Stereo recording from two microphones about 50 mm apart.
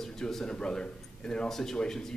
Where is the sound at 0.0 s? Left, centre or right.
Centre.